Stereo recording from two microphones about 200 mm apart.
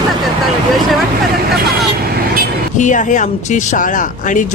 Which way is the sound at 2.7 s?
40° left (ahead or behind).